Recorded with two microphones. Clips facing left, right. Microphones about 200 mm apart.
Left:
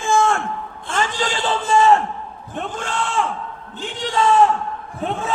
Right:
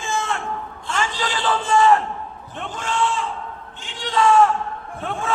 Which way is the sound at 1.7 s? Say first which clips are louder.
Left 1 dB; 25° left (ahead or behind).